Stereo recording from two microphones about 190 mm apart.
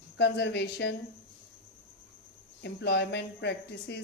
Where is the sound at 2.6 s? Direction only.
65° left (ahead or behind).